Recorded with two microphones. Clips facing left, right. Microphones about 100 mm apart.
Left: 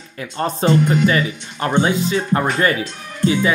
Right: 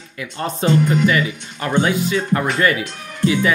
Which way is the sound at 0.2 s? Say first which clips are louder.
Left 2 dB; 35° left (ahead or behind).